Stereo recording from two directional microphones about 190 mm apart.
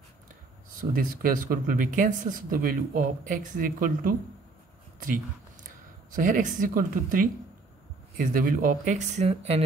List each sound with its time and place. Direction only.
0.7 s speech: 50° right (ahead or behind)
6.1 s speech: 45° right (ahead or behind)